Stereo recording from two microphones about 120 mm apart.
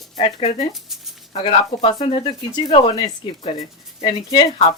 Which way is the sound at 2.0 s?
45° left (ahead or behind).